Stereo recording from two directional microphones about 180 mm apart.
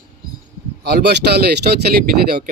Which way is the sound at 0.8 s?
65° right (ahead or behind).